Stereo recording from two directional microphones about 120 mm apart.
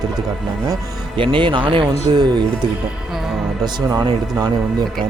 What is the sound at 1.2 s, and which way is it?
Speech, 45° right (ahead or behind).